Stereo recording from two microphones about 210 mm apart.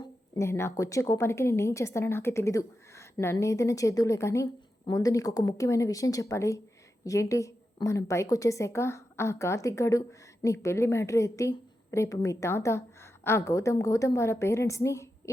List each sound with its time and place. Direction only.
0.0 s a woman's voice: 15° left (ahead or behind)